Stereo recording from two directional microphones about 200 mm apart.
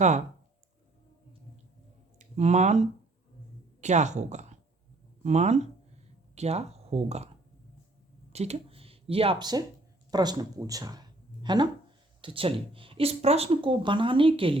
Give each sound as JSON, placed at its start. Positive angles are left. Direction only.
{"t": 2.1, "sound": "speech", "side_deg": -35}
{"t": 8.3, "sound": "speech", "side_deg": -30}